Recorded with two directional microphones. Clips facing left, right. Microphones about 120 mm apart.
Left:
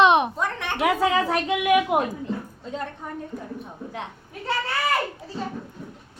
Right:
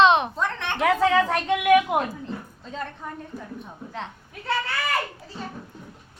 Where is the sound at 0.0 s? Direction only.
15° left (ahead or behind).